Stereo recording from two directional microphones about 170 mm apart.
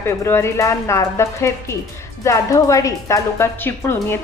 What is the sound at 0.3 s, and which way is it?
A woman's voice, 15° left (ahead or behind).